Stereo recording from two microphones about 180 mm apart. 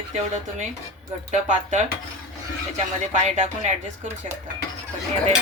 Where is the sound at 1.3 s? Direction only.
40° right (ahead or behind).